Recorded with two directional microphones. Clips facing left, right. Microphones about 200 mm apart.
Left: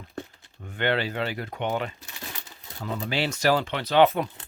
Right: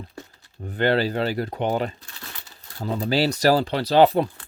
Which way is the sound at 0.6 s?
35° right (ahead or behind).